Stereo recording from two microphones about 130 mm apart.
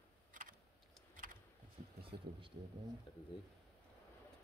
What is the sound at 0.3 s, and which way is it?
Computer keyboard, 90° right.